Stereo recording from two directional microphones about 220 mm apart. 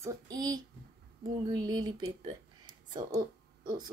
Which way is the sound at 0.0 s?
15° right (ahead or behind).